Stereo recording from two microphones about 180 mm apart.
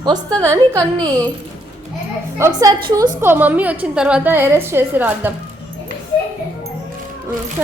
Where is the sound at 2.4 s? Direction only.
15° right (ahead or behind).